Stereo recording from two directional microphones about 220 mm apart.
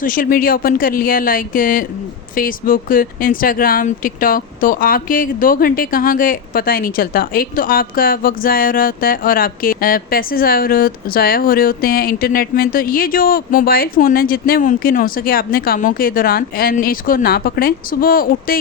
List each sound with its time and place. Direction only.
0.0 s speech: 40° left (ahead or behind)